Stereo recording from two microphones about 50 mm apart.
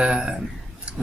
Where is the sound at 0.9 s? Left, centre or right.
Right.